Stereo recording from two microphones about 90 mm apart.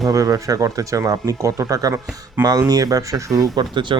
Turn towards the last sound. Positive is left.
turn(degrees=-60)  # may be behind; listen again after turning